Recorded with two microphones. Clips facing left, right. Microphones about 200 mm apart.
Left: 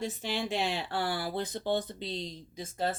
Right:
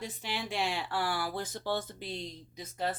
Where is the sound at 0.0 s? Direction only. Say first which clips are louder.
Left 5 dB; 25° left (ahead or behind).